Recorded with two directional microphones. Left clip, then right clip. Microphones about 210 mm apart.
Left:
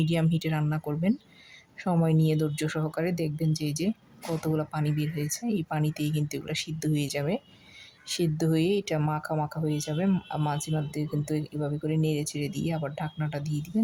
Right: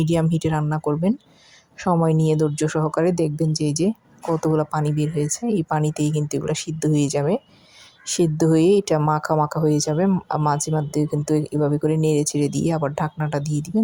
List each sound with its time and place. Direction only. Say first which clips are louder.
0.0 s speech: right 7 dB; 20° right (ahead or behind)